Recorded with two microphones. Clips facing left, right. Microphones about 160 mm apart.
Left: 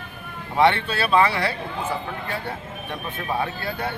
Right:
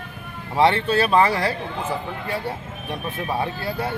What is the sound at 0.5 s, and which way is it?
Speech, 35° right (ahead or behind).